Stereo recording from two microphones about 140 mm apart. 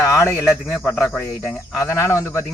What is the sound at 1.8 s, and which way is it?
Speech, 20° left (ahead or behind).